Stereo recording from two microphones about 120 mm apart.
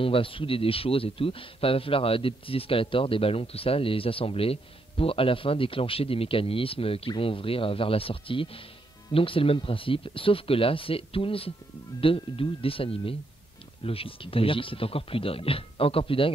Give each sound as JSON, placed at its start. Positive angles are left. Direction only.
{"t": 0.0, "sound": "speech", "side_deg": 50}